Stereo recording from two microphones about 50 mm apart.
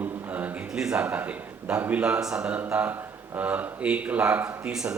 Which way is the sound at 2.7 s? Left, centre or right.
Right.